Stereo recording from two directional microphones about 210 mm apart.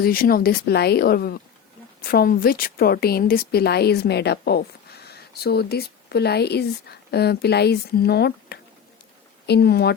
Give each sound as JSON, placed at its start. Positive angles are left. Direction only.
{"t": 0.0, "sound": "a woman's voice", "side_deg": 45}